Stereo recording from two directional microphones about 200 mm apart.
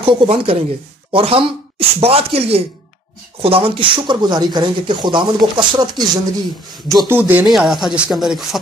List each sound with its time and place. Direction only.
0.0 s speech: 25° right (ahead or behind)
7.1 s speech: 10° right (ahead or behind)